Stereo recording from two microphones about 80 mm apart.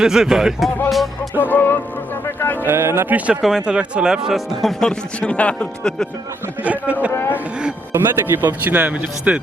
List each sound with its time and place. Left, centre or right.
0.0 s speech: centre
1.4 s speech: left
2.2 s music: left
2.6 s speech: right
3.4 s speech: centre
4.8 s speech: centre
6.6 s speech: centre
7.1 s speech: left
7.9 s speech: right